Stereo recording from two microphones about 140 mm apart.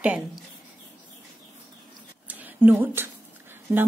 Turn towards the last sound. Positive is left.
turn(degrees=-15)  # may be behind; listen again after turning